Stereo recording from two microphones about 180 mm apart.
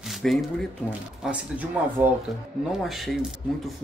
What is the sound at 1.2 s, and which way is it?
Speech, 5° right (ahead or behind).